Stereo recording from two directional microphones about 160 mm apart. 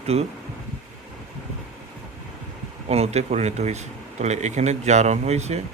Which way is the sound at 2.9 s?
40° right (ahead or behind).